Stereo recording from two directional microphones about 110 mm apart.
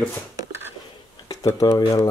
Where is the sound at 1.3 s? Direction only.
25° left (ahead or behind).